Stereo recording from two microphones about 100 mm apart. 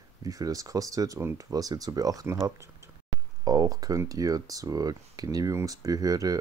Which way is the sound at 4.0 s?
35° right (ahead or behind).